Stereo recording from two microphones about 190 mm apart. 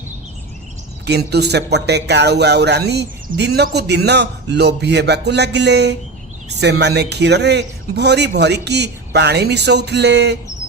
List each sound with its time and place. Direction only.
1.0 s speech: 60° right (ahead or behind)